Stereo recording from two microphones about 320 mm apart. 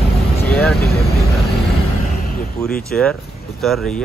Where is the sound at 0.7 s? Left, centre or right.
Left.